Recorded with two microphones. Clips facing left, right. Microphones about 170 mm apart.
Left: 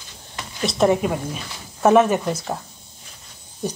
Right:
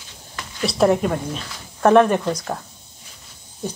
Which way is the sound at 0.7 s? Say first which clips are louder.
Right 1 dB; centre (ahead or behind).